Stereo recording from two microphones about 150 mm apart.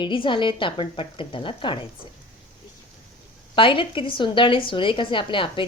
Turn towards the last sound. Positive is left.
turn(degrees=35)  # may be behind; listen again after turning